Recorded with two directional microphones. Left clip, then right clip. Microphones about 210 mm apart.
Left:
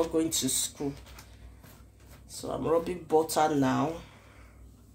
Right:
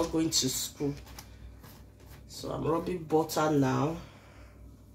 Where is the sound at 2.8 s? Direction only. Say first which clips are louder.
Left 2 dB; 55° left (ahead or behind).